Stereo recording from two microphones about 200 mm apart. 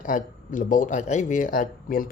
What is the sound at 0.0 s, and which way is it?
Speech, 40° left (ahead or behind).